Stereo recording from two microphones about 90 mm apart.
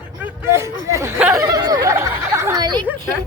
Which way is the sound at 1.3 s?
40° right (ahead or behind).